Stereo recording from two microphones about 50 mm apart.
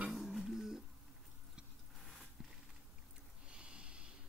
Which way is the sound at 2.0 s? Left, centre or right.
Centre.